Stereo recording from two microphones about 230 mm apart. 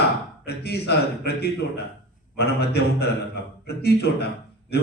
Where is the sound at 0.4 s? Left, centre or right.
Left.